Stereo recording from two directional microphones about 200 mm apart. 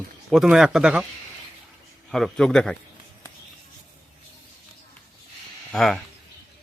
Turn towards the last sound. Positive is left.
turn(degrees=0)  # may be behind; listen again after turning